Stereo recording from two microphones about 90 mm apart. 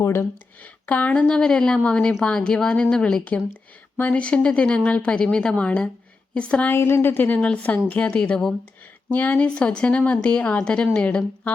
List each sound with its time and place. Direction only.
0.0 s speech: 25° left (ahead or behind)
0.9 s speech: 15° left (ahead or behind)
6.7 s a woman's voice: 25° left (ahead or behind)